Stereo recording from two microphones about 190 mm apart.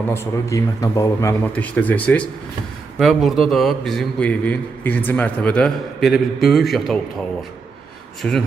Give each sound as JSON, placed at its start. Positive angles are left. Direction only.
{"t": 0.1, "sound": "a man's voice", "side_deg": 15}
{"t": 8.2, "sound": "a man's voice", "side_deg": 5}